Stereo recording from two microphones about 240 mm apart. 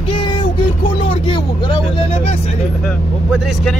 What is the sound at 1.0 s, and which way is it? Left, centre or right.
Vehicle, left.